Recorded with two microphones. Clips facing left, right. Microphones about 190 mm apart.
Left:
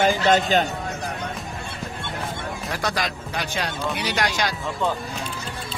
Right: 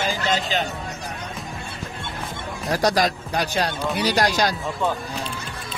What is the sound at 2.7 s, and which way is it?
Speech, 40° right (ahead or behind).